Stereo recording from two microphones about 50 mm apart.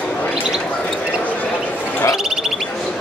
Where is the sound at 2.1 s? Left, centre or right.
Centre.